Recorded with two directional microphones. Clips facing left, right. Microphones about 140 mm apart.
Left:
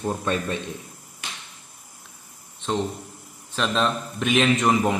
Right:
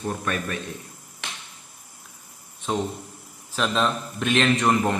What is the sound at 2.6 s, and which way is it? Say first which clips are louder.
Speech: left 1 dB; 10° right (ahead or behind).